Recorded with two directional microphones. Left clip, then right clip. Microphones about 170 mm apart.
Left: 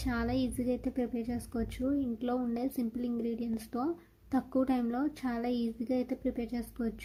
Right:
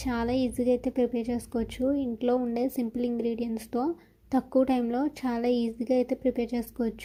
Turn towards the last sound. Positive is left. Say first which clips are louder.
# right 7 dB
turn(degrees=-20)  # may be behind; listen again after turning